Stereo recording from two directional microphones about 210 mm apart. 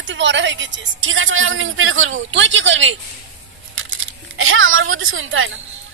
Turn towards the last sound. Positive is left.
turn(degrees=-70)  # may be behind; listen again after turning